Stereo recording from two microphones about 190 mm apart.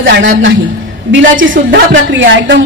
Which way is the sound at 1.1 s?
90° right.